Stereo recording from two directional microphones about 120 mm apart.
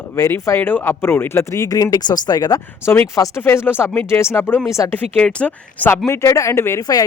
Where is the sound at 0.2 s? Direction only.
25° left (ahead or behind).